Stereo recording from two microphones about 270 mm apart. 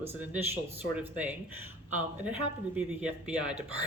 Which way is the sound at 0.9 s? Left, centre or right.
Centre.